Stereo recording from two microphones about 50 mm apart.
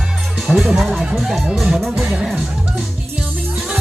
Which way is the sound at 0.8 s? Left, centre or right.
Centre.